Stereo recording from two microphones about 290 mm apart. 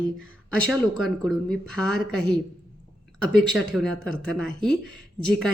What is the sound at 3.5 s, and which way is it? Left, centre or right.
Speech, centre.